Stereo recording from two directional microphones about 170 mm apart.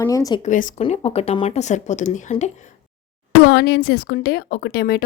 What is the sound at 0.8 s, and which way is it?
Speech, 35° left (ahead or behind).